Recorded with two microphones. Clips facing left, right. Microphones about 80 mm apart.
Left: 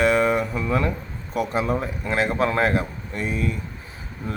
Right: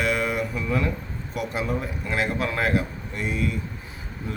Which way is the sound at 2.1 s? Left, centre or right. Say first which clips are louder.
Left 4 dB; left.